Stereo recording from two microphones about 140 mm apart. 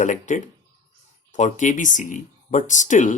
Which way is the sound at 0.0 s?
60° left (ahead or behind).